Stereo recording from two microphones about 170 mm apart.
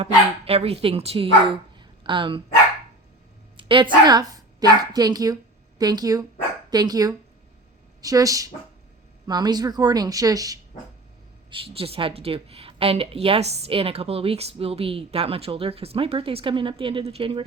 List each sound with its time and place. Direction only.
0.0 s speech: 35° right (ahead or behind)
3.6 s a woman's voice: 30° right (ahead or behind)
11.5 s a woman's voice: 35° right (ahead or behind)